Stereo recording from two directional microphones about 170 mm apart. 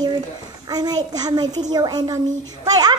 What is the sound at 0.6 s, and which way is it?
Speech, 25° right (ahead or behind).